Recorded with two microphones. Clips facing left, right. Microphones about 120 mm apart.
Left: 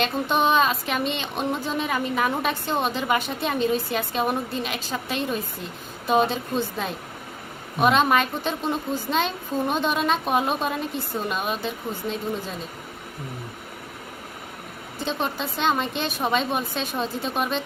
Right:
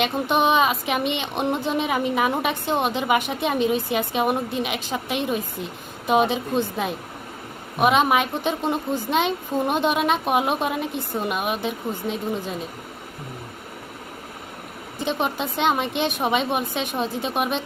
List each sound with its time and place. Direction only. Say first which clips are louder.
0.0 s a woman's voice: right 2 dB; 15° right (ahead or behind)
14.9 s a woman's voice: right 3 dB; 15° right (ahead or behind)